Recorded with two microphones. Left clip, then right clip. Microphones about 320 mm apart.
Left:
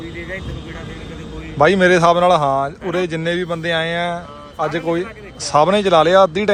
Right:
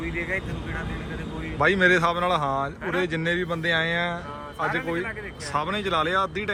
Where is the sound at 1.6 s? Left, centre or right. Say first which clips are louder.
Left 8 dB; centre.